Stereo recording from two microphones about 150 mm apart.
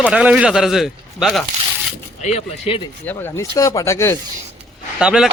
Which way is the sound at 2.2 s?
45° left (ahead or behind).